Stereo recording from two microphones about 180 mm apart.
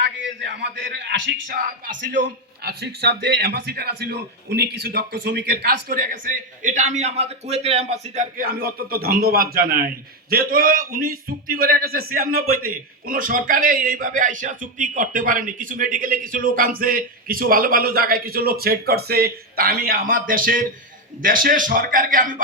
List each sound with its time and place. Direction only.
0.3 s a man's voice: 75° right (ahead or behind)
2.6 s a man's voice: 65° right (ahead or behind); by 22.4 s 50° right (ahead or behind)